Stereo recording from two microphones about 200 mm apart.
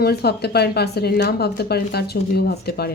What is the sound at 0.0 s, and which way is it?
Speech, 55° left (ahead or behind).